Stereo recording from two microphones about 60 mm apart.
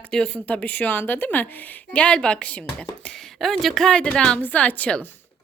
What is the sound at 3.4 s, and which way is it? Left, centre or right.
Speech, centre.